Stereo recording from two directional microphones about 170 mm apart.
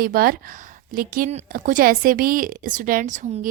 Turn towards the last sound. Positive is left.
turn(degrees=-45)  # may be behind; listen again after turning